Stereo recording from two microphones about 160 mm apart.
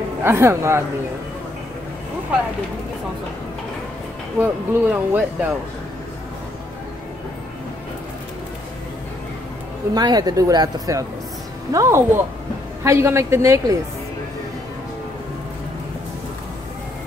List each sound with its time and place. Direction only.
0.2 s speech: 15° right (ahead or behind)
4.4 s speech: 10° right (ahead or behind)
9.9 s speech: 25° right (ahead or behind)